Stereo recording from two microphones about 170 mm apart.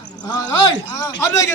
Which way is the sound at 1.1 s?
15° left (ahead or behind).